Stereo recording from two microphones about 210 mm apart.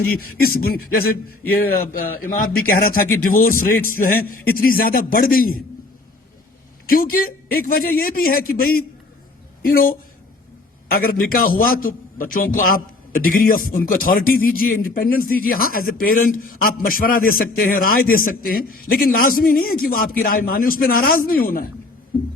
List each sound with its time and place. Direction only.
0.0 s a man's voice: 45° left (ahead or behind)
6.8 s speech: 45° left (ahead or behind)